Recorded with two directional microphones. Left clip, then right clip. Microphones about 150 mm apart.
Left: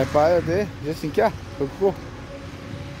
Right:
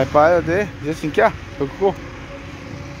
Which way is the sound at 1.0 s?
10° left (ahead or behind).